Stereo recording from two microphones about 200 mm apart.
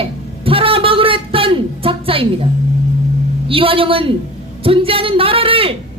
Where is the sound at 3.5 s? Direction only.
25° right (ahead or behind).